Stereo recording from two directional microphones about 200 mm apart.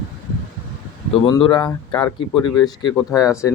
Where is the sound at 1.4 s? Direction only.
20° left (ahead or behind).